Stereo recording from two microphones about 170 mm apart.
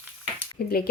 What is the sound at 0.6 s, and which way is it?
Speech, 65° left (ahead or behind).